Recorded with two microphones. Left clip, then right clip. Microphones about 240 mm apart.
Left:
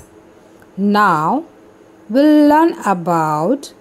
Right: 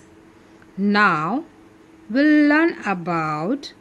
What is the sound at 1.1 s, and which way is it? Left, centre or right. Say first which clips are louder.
Speech: left 6 dB; centre.